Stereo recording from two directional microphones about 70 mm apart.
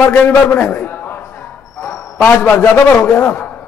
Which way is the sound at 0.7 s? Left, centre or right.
Left.